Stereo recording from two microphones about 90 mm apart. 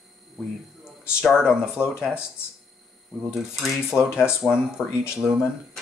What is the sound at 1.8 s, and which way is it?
Speech, 15° right (ahead or behind).